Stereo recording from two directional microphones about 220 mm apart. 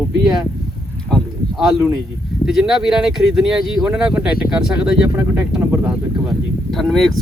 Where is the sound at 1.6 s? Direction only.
Centre (ahead or behind).